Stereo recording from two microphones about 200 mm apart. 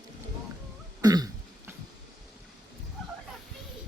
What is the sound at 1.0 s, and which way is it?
Throat clearing, 20° right (ahead or behind).